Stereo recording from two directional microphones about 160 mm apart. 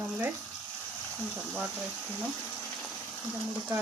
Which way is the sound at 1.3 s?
5° right (ahead or behind).